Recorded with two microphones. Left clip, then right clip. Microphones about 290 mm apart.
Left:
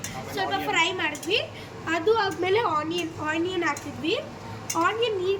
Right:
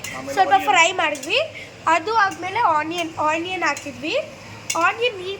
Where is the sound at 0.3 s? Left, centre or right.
Centre.